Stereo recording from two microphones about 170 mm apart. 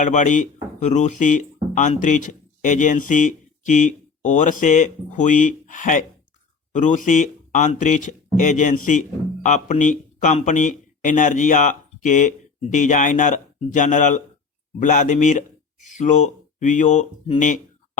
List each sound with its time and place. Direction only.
0.0 s speech: 45° left (ahead or behind)